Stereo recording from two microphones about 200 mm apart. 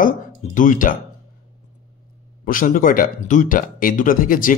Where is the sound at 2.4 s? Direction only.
45° left (ahead or behind).